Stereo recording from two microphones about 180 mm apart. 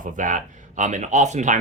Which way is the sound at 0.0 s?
45° right (ahead or behind).